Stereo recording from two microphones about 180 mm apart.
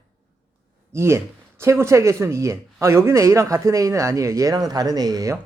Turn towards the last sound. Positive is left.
turn(degrees=-20)  # may be behind; listen again after turning